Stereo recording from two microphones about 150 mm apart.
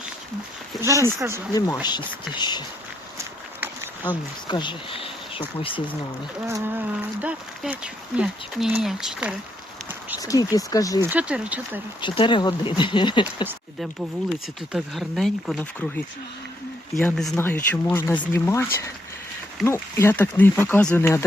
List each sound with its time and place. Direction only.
0.8 s speech: 20° right (ahead or behind)
1.5 s speech: 25° left (ahead or behind)
3.2 s a sound: 10° right (ahead or behind)
4.4 s speech: 30° left (ahead or behind)
6.5 s speech: 10° right (ahead or behind)
10.2 s speech: 25° left (ahead or behind)
11.0 s speech: 10° right (ahead or behind)
12.0 s speech: 35° left (ahead or behind)
14.7 s speech: centre (ahead or behind)
17.0 s speech: 5° left (ahead or behind)